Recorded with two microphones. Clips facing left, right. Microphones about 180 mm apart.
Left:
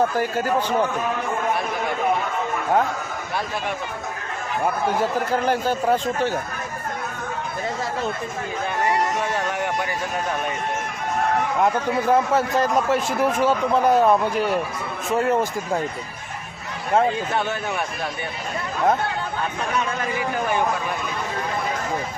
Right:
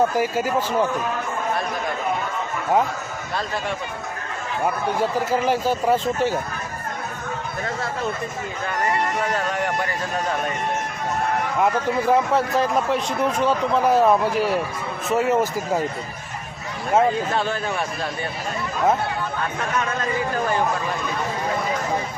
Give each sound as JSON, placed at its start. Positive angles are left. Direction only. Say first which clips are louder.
{"t": 0.2, "sound": "speech", "louder": "even", "side_deg": -5}
{"t": 4.9, "sound": "speech", "louder": "even", "side_deg": -5}
{"t": 11.6, "sound": "speech", "louder": "right 2 dB", "side_deg": 0}